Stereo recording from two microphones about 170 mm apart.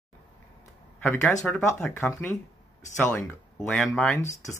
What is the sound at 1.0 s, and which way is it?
Speech, 10° left (ahead or behind).